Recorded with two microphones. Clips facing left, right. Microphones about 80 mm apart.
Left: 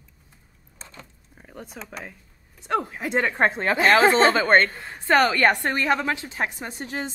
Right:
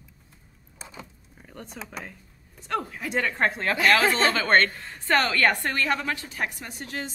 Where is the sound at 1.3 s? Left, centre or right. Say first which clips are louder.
Left 2 dB; centre.